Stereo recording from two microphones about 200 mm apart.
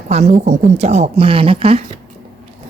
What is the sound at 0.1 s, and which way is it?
Speech, 35° right (ahead or behind).